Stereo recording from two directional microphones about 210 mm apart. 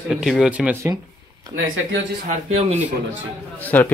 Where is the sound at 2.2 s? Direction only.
30° right (ahead or behind).